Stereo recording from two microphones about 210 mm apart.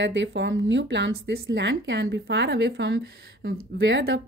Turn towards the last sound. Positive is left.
turn(degrees=-65)  # may be behind; listen again after turning